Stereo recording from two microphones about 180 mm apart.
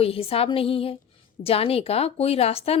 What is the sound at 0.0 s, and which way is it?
A woman's voice, 30° left (ahead or behind).